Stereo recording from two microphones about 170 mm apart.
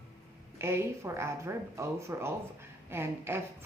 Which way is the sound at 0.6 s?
15° right (ahead or behind).